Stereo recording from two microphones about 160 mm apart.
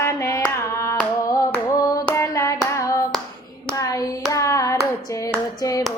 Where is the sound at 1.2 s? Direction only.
20° left (ahead or behind).